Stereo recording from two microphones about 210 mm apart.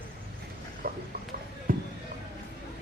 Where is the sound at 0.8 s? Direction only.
45° right (ahead or behind).